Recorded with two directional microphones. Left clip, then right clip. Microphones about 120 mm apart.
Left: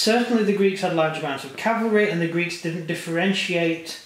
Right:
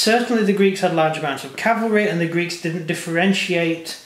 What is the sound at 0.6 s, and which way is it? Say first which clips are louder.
Speech: right 3 dB; 45° right (ahead or behind).